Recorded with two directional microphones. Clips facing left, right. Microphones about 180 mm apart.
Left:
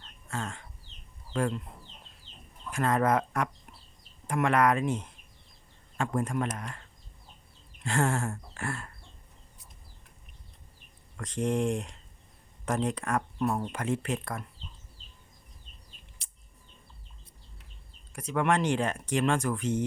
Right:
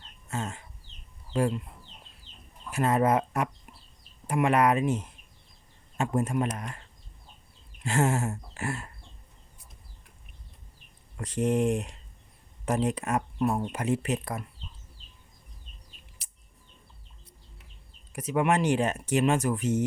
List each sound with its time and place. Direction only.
0.3 s a sound: 20° right (ahead or behind)
1.4 s speech: 10° right (ahead or behind)
2.7 s speech: 10° right (ahead or behind)
6.0 s speech: 25° right (ahead or behind)
7.9 s speech: 20° right (ahead or behind)
11.2 s speech: 10° right (ahead or behind)
18.3 s speech: 10° right (ahead or behind)